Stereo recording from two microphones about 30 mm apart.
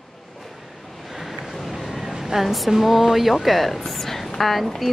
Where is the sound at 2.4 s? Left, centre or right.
Centre.